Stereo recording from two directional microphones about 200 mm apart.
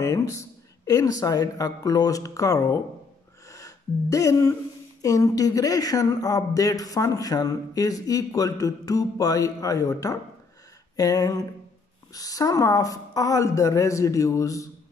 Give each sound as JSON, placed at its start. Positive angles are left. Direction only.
{"t": 0.0, "sound": "speech", "side_deg": 15}